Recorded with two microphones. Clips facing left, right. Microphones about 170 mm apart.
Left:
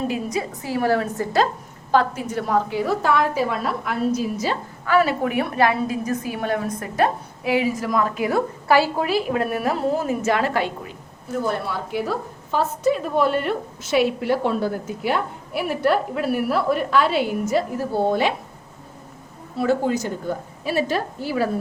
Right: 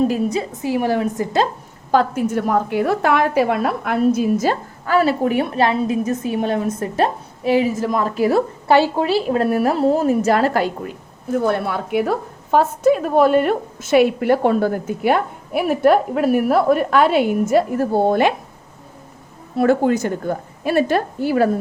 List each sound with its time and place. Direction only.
0.1 s a woman's voice: 30° right (ahead or behind)
0.6 s a woman's voice: 15° right (ahead or behind)
1.9 s a woman's voice: 45° right (ahead or behind)
4.9 s a woman's voice: 30° right (ahead or behind)
11.4 s a woman's voice: 60° right (ahead or behind)
19.5 s a woman's voice: 55° right (ahead or behind)